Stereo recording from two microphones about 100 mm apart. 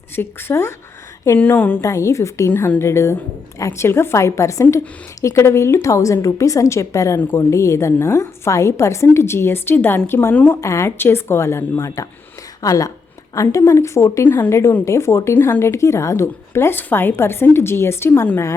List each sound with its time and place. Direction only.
0.2 s a woman's voice: 25° left (ahead or behind)
1.8 s a woman's voice: 30° left (ahead or behind)